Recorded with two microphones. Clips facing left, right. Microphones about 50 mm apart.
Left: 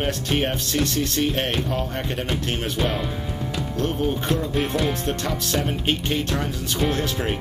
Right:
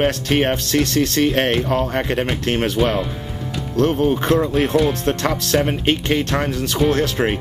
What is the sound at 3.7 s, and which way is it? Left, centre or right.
Speech, right.